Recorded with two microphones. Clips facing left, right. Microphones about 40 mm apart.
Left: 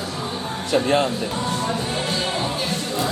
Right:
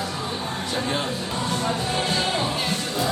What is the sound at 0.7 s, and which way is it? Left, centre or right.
Speech, left.